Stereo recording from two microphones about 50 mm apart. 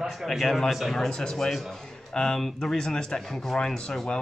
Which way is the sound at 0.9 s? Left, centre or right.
Centre.